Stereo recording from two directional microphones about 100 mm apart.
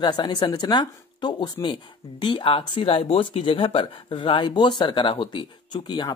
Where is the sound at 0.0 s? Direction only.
45° left (ahead or behind).